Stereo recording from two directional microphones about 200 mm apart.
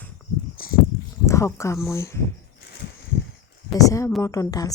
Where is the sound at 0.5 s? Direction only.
45° left (ahead or behind).